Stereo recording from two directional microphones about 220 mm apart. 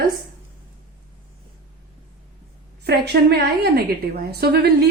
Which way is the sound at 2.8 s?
45° right (ahead or behind).